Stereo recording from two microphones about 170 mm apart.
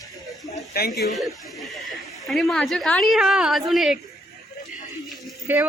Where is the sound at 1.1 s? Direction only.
Centre (ahead or behind).